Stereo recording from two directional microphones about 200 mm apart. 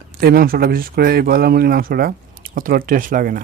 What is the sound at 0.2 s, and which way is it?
Speech, 50° right (ahead or behind).